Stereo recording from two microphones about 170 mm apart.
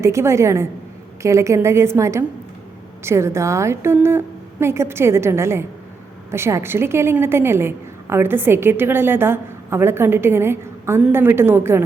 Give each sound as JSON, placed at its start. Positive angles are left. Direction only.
{"t": 0.0, "sound": "a woman's voice", "side_deg": -15}